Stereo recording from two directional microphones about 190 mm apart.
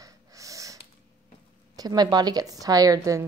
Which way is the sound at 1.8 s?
20° right (ahead or behind).